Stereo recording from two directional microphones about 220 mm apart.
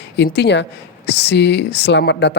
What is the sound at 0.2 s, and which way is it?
Speech, 50° left (ahead or behind).